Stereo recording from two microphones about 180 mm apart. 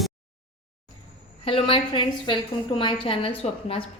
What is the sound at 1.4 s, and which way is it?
A woman's voice, 30° left (ahead or behind).